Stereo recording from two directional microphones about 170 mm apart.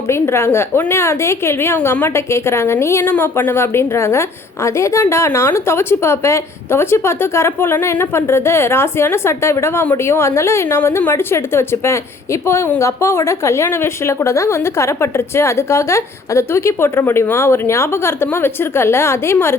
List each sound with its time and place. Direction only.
0.1 s a woman's voice: 15° left (ahead or behind)